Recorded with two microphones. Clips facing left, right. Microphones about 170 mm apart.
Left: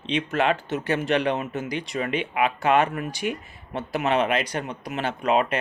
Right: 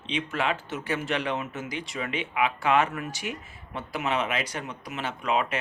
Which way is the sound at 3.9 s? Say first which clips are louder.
Left 6 dB; 60° left (ahead or behind).